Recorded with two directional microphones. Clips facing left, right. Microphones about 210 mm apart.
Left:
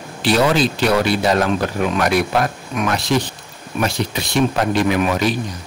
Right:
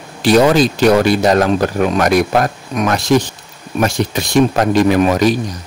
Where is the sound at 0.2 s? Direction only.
45° right (ahead or behind).